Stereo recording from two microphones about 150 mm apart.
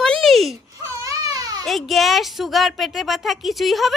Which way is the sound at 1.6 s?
Centre (ahead or behind).